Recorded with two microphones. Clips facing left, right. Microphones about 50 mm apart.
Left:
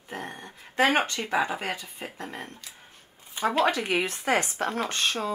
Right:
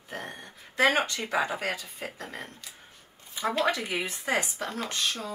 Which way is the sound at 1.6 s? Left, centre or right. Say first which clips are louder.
Even; left.